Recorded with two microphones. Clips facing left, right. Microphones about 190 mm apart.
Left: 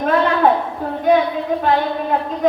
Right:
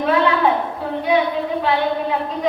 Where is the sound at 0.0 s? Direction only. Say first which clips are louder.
Left 1 dB; 45° left (ahead or behind).